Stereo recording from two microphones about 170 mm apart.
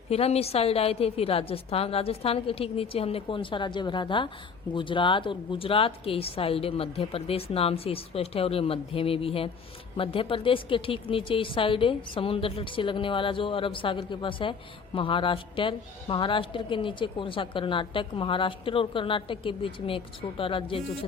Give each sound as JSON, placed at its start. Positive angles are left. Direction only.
{"t": 0.1, "sound": "a woman's voice", "side_deg": 35}